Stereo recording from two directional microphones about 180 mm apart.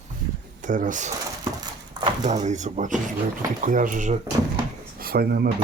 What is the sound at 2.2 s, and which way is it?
Speech, 40° right (ahead or behind).